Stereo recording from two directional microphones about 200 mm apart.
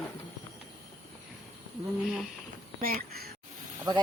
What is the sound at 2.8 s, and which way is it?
Speech, 50° right (ahead or behind).